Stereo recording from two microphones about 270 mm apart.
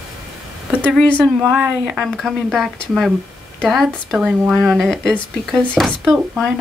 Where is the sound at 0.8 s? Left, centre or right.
Centre.